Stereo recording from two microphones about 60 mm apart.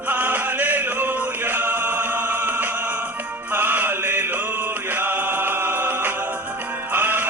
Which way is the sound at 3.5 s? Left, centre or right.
Right.